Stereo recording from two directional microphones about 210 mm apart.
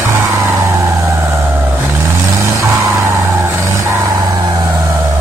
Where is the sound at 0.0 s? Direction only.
15° right (ahead or behind).